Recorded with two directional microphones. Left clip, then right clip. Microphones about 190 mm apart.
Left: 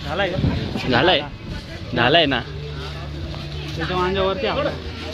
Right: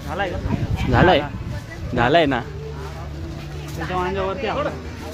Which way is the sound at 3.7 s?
35° left (ahead or behind).